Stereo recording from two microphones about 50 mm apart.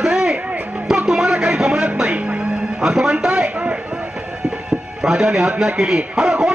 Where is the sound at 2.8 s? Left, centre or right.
Centre.